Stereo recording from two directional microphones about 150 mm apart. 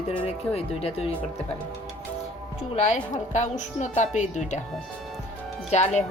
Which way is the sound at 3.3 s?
50° left (ahead or behind).